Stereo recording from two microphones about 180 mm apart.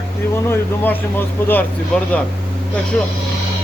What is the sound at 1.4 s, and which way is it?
Speech, 10° left (ahead or behind).